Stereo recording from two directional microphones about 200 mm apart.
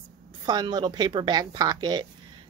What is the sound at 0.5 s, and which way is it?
Speech, 20° right (ahead or behind).